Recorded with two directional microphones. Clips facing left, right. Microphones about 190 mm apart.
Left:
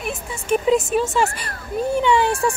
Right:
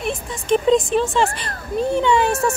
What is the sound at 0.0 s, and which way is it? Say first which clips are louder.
A woman's voice: right 3 dB; 5° left (ahead or behind).